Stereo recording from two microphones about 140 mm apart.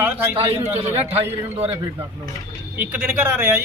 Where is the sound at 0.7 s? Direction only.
50° right (ahead or behind).